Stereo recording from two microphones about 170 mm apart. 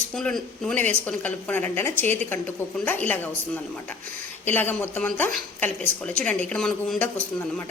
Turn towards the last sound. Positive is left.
turn(degrees=5)  # may be behind; listen again after turning